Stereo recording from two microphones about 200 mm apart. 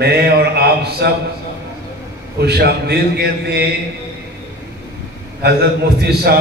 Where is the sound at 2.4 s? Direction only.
55° right (ahead or behind).